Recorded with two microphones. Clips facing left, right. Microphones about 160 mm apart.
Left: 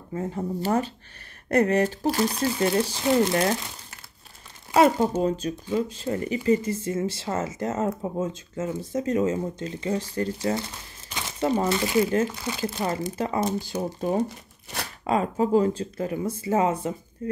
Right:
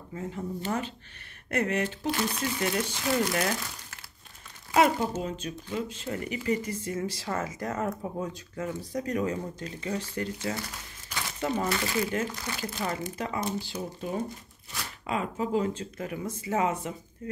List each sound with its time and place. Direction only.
0.1 s speech: 40° left (ahead or behind)
4.7 s speech: 40° left (ahead or behind)
15.0 s speech: 40° left (ahead or behind)